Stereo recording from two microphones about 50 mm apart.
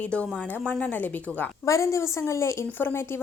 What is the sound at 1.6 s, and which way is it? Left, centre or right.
A woman's voice, left.